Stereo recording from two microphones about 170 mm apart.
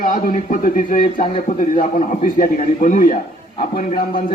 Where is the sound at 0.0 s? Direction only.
50° left (ahead or behind).